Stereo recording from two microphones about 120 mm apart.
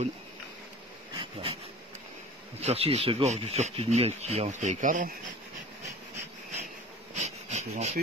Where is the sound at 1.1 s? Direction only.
50° right (ahead or behind); by 5.0 s 90° right.